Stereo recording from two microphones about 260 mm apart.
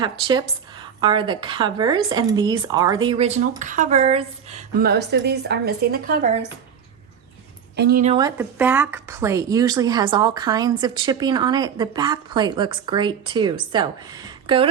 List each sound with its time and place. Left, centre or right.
0.0 s a woman's voice: centre
4.8 s speech: right
7.8 s speech: right
8.0 s speech: centre
8.4 s a woman's voice: centre